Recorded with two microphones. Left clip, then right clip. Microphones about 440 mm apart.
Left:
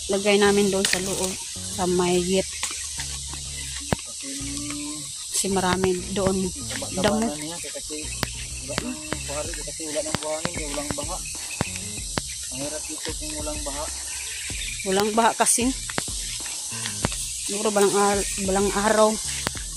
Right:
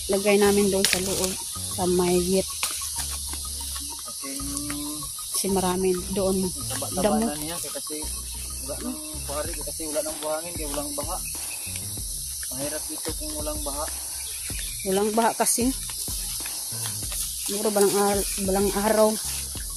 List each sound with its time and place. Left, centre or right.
0.1 s speech: right
5.4 s speech: right
9.9 s snake: right
14.9 s speech: right
17.6 s speech: right